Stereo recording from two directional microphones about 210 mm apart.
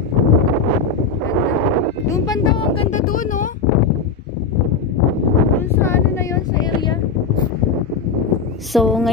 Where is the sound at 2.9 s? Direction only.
40° left (ahead or behind).